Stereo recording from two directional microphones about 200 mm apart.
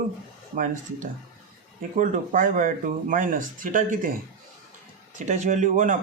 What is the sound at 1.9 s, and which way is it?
Speech, 40° right (ahead or behind).